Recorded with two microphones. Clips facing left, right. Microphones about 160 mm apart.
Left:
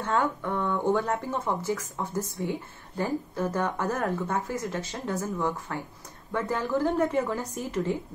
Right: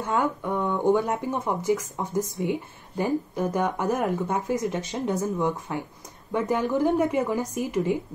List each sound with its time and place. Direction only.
0.0 s speech: 15° right (ahead or behind)